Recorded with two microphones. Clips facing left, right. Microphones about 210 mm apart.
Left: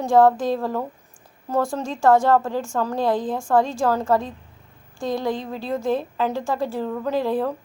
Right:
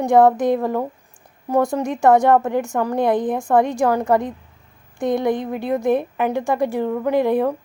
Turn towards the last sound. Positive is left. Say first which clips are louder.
# right 5 dB
turn(degrees=-15)  # may be behind; listen again after turning